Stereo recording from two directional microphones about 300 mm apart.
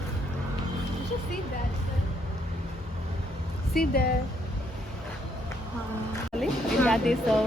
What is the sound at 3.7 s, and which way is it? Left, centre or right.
Speech, left.